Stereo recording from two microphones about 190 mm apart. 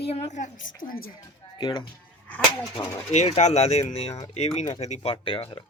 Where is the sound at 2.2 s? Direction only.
10° left (ahead or behind).